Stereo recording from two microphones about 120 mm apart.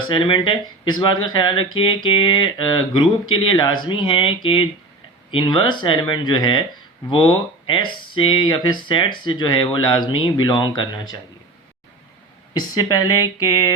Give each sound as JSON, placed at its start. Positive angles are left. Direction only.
{"t": 0.1, "sound": "speech", "side_deg": 45}
{"t": 12.5, "sound": "speech", "side_deg": 30}